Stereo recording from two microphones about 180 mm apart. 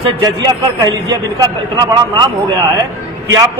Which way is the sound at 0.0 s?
20° right (ahead or behind).